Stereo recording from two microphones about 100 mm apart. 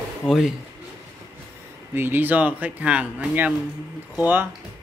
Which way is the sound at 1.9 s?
20° right (ahead or behind).